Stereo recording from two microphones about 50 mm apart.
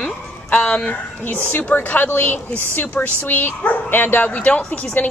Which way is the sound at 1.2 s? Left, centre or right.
Left.